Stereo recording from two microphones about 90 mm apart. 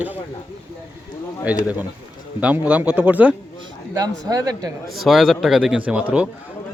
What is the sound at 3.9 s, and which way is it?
Speech, 45° right (ahead or behind).